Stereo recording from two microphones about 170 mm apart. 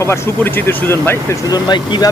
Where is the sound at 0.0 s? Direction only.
15° left (ahead or behind).